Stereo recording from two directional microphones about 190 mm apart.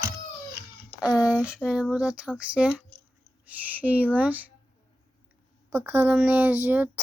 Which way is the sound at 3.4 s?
10° right (ahead or behind).